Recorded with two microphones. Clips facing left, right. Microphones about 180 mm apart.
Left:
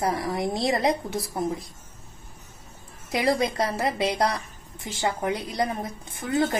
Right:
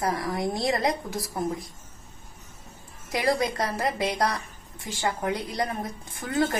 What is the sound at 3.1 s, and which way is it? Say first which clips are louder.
A woman's voice: left 1 dB; 25° left (ahead or behind).